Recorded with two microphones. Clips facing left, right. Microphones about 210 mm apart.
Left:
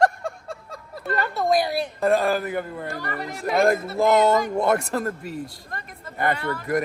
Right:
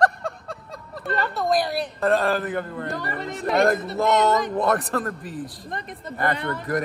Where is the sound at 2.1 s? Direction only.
5° left (ahead or behind).